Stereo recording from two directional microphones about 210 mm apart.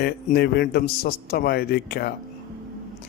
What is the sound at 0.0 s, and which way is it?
A man's voice, 45° left (ahead or behind).